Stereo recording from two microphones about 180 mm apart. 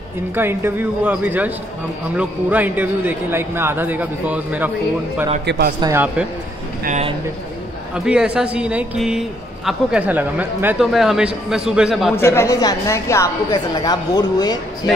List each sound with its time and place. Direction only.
0.3 s a man's voice: 10° right (ahead or behind)
5.4 s a man's voice: 70° right (ahead or behind)
5.8 s a man's voice: 20° right (ahead or behind)
6.8 s a man's voice: 40° right (ahead or behind)
7.9 s speech: 5° right (ahead or behind)
12.2 s a woman's voice: 15° left (ahead or behind)